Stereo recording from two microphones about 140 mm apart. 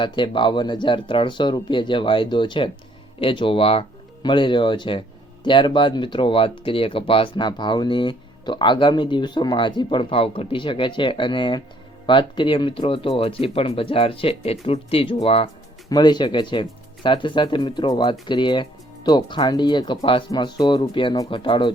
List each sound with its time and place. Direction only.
0.0 s speech: 35° left (ahead or behind)
15.9 s speech: 30° left (ahead or behind)